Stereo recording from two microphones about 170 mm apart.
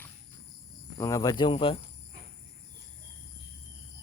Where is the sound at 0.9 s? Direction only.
20° left (ahead or behind).